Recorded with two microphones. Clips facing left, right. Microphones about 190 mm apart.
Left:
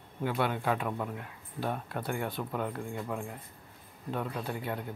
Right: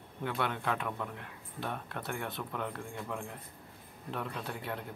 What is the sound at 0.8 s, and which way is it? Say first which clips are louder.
Speech: left 4 dB; 20° left (ahead or behind).